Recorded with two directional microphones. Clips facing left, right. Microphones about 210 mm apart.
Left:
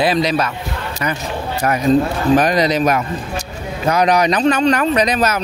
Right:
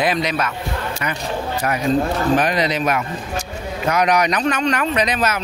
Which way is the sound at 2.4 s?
40° left (ahead or behind).